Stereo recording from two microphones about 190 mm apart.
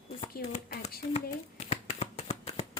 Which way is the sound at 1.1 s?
35° left (ahead or behind).